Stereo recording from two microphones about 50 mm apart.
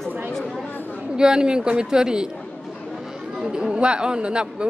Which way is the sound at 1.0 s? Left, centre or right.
Centre.